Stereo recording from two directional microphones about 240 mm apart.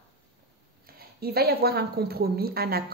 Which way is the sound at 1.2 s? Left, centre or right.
Right.